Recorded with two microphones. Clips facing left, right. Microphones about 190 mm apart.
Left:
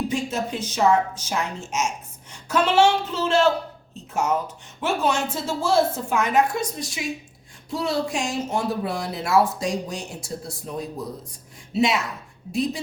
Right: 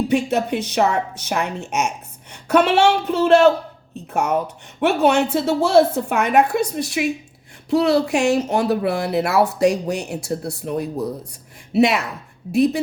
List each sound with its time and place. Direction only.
0.1 s a woman's voice: 65° right (ahead or behind)